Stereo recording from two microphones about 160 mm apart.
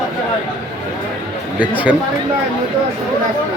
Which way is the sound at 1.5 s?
10° right (ahead or behind).